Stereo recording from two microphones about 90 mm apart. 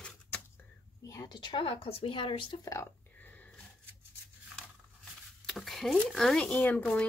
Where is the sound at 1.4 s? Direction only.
70° left (ahead or behind).